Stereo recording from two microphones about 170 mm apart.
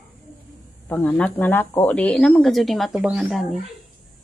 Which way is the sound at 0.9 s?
10° left (ahead or behind).